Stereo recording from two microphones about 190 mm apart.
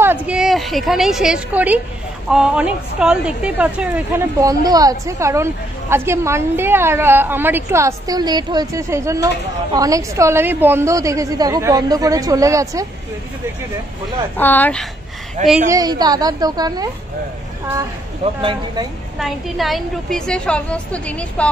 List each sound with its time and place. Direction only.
0.0 s a woman's voice: 10° right (ahead or behind)
14.3 s speech: 10° left (ahead or behind)
15.4 s speech: 40° right (ahead or behind)
15.7 s a woman's voice: 20° right (ahead or behind)
18.4 s a woman's voice: 25° right (ahead or behind)
19.1 s a woman's voice: centre (ahead or behind)